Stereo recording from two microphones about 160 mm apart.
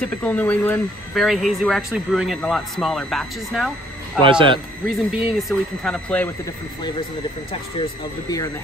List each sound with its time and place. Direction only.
0.0 s speech: 10° left (ahead or behind)
1.2 s speech: centre (ahead or behind)
4.2 s speech: 30° right (ahead or behind)
4.8 s speech: 5° right (ahead or behind)
5.9 s speech: 10° left (ahead or behind)